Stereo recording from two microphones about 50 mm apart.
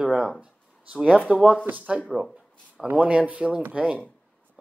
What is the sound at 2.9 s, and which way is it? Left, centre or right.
A man's voice, right.